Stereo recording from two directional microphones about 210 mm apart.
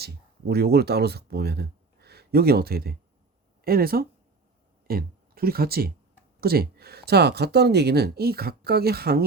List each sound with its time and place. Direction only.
0.0 s speech: 50° right (ahead or behind)